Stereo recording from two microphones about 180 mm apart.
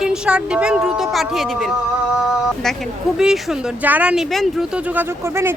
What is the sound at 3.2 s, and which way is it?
Speech, 5° right (ahead or behind).